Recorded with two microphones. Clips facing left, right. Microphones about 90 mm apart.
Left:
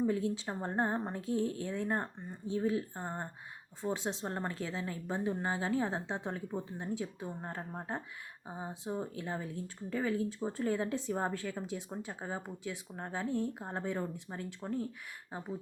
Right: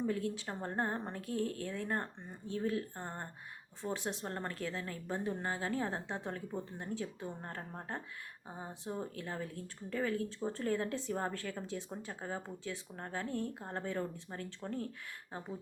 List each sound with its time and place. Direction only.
0.0 s speech: 20° left (ahead or behind)